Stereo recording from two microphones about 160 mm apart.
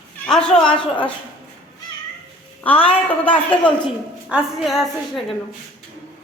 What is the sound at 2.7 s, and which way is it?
Speech, 35° left (ahead or behind).